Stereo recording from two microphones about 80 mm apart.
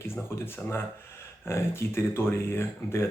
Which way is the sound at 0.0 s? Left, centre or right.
Left.